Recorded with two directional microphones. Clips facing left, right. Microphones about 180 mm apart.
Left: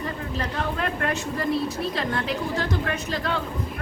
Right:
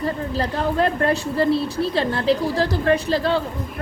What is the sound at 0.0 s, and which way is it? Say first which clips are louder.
Speech: right 6 dB; 35° right (ahead or behind).